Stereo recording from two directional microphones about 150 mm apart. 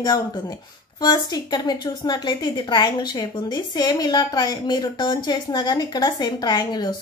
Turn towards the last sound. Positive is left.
turn(degrees=25)  # may be behind; listen again after turning